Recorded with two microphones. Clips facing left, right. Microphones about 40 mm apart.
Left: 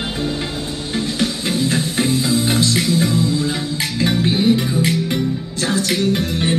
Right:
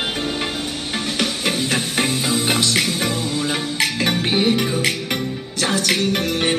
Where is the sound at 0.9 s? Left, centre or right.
Right.